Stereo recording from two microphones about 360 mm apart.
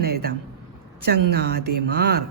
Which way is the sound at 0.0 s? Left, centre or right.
Right.